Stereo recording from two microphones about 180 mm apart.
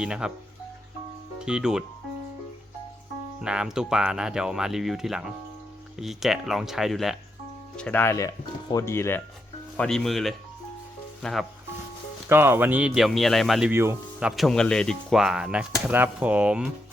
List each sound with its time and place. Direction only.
0.0 s speech: 5° right (ahead or behind)
1.5 s speech: 5° right (ahead or behind)
3.4 s speech: 5° right (ahead or behind)
12.3 s speech: 10° right (ahead or behind)